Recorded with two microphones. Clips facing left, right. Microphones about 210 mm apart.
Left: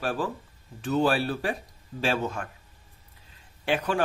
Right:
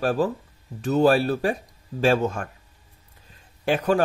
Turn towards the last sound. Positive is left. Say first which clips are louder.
# right 5 dB
turn(degrees=-40)  # may be behind; listen again after turning